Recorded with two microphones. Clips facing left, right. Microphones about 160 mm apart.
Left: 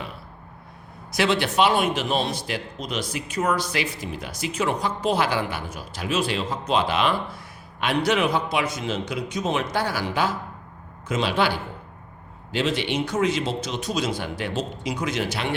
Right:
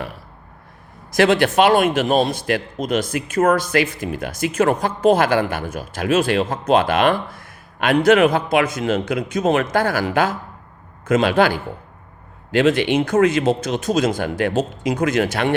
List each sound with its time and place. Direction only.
1.1 s a man's voice: 50° right (ahead or behind)